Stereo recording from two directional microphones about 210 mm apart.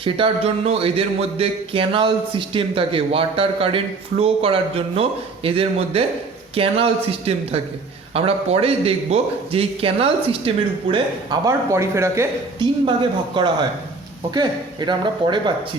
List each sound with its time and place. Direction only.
0.0 s speech: 25° right (ahead or behind)